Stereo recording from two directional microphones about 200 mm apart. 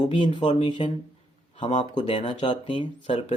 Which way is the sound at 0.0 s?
25° left (ahead or behind).